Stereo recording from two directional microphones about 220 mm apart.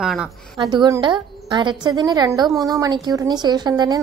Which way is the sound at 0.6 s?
15° right (ahead or behind).